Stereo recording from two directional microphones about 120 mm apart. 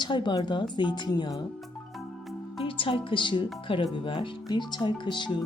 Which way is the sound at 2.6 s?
50° left (ahead or behind).